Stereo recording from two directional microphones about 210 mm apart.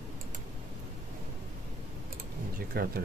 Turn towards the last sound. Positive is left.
turn(degrees=-45)  # may be behind; listen again after turning